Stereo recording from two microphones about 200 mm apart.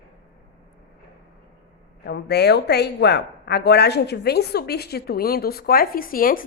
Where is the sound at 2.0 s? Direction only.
55° left (ahead or behind).